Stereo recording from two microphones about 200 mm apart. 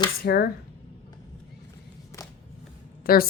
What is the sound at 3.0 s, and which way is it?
Speech, 50° left (ahead or behind).